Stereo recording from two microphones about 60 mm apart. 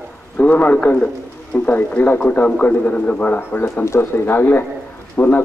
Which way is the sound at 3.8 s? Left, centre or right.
Left.